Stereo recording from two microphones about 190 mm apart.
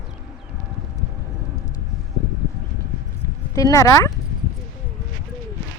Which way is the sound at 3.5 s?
15° left (ahead or behind).